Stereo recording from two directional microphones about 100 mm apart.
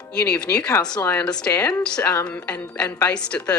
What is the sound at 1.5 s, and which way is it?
Speech, 35° left (ahead or behind).